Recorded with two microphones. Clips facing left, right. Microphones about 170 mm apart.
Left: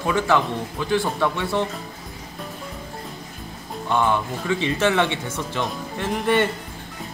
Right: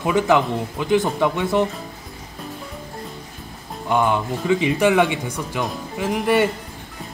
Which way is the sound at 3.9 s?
15° right (ahead or behind).